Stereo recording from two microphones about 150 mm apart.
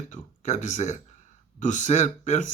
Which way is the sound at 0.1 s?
55° left (ahead or behind).